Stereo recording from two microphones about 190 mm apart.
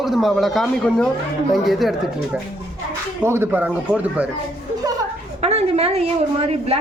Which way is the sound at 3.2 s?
10° right (ahead or behind).